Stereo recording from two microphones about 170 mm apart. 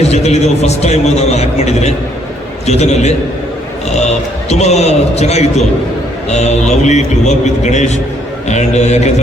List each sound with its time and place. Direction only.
0.0 s a man's voice: 40° left (ahead or behind)